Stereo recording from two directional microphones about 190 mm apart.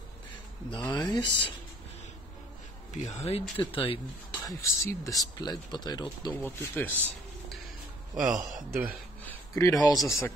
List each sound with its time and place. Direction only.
0.7 s speech: 20° left (ahead or behind)
2.9 s speech: 35° left (ahead or behind)
6.3 s speech: 10° left (ahead or behind)
8.1 s speech: centre (ahead or behind)
9.2 s speech: 15° left (ahead or behind)